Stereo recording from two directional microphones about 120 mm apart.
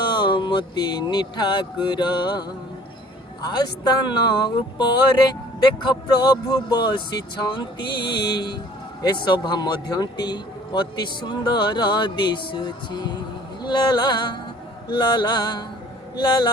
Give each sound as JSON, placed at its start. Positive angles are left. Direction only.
{"t": 0.0, "sound": "speech", "side_deg": 40}
{"t": 3.5, "sound": "a man's voice", "side_deg": 35}